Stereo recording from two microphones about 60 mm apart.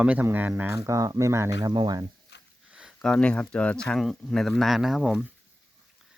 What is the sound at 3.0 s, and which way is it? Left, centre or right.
Speech, centre.